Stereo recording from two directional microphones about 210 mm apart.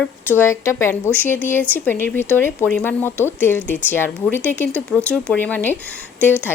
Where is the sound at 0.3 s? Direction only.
10° left (ahead or behind).